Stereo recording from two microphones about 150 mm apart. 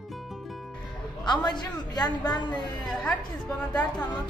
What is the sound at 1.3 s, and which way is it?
A woman's voice, 30° left (ahead or behind).